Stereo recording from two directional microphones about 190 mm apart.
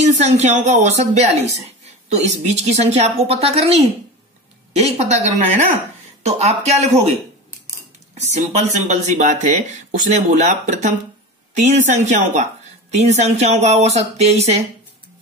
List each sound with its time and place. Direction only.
0.0 s speech: 35° right (ahead or behind)